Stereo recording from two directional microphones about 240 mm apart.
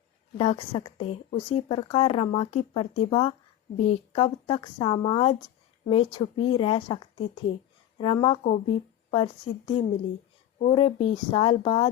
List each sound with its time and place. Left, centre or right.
0.3 s speech: left